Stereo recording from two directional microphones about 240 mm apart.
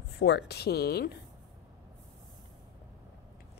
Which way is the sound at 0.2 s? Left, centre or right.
Left.